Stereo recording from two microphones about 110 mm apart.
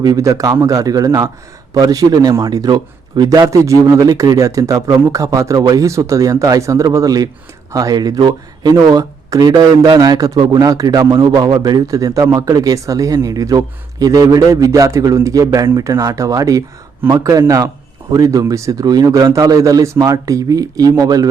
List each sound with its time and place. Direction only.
0.0 s a man's voice: 35° right (ahead or behind)